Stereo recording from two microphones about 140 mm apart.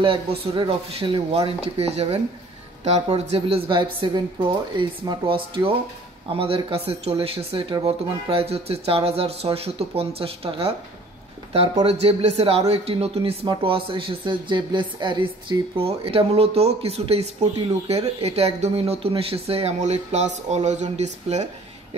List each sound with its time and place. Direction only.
0.0 s a woman's voice: 40° right (ahead or behind)
11.8 s speech: 45° right (ahead or behind)